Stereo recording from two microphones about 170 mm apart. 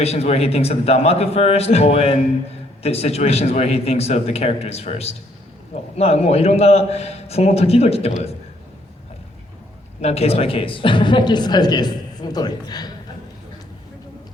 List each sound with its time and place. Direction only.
0.0 s a man's voice: 40° left (ahead or behind)
10.0 s a woman's voice: 35° left (ahead or behind)